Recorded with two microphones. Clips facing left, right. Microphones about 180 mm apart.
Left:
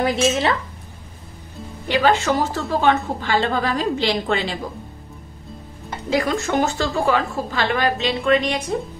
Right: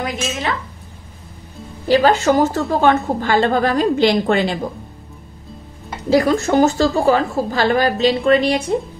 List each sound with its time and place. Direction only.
0.0 s speech: 30° left (ahead or behind)
1.9 s a woman's voice: 35° right (ahead or behind)
6.0 s a woman's voice: 35° right (ahead or behind)